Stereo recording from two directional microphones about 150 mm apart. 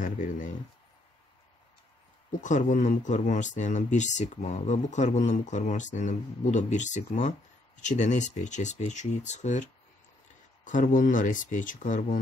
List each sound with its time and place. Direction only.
0.0 s speech: 55° left (ahead or behind)
2.4 s speech: 55° left (ahead or behind)